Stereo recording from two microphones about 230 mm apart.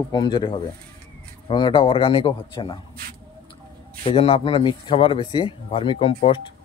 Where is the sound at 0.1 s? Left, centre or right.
Centre.